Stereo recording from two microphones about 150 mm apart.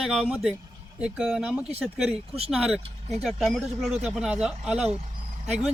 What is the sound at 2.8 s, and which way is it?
Speech, 45° right (ahead or behind).